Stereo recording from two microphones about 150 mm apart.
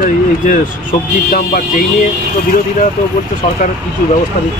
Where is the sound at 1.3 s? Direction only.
70° left (ahead or behind).